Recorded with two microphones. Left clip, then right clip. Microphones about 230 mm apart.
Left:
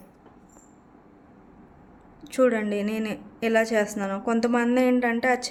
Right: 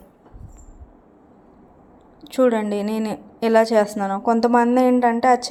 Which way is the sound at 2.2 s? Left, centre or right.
Centre.